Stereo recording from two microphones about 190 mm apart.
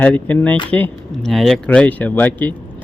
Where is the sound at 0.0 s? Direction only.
10° left (ahead or behind).